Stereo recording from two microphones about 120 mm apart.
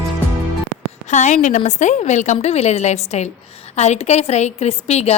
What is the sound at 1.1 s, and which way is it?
A woman's voice, 80° left.